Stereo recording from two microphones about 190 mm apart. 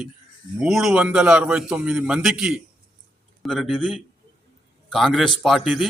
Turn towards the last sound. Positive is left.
turn(degrees=0)  # may be behind; listen again after turning